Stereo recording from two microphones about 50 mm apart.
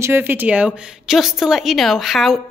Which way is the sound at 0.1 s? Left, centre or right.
Right.